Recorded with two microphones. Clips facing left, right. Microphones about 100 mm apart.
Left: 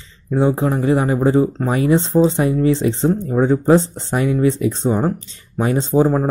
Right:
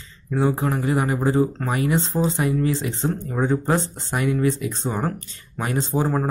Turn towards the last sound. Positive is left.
turn(degrees=20)  # may be behind; listen again after turning